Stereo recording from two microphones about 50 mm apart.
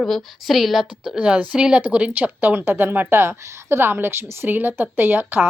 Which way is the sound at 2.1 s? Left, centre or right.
Right.